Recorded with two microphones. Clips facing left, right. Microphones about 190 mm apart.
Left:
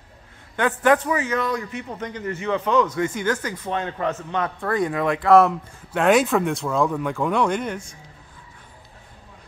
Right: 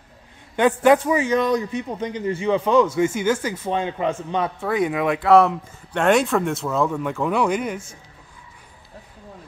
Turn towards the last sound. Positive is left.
turn(degrees=-5)  # may be behind; listen again after turning